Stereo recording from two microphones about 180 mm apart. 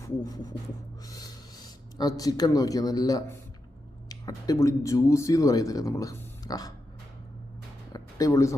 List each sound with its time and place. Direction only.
0.0 s music: 20° left (ahead or behind)
1.0 s speech: 20° left (ahead or behind)
7.9 s speech: 20° left (ahead or behind)